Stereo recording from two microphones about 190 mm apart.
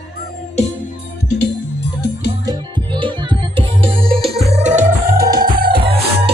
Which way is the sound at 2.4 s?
25° right (ahead or behind).